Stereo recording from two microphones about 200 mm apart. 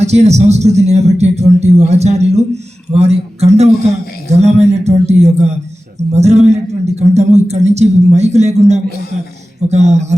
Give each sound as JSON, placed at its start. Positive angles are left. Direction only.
{"t": 0.0, "sound": "a man's voice", "side_deg": -35}